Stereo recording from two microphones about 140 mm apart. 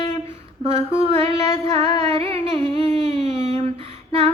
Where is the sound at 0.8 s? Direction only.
45° right (ahead or behind).